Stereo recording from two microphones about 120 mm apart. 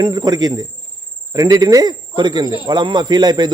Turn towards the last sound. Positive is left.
turn(degrees=-35)  # may be behind; listen again after turning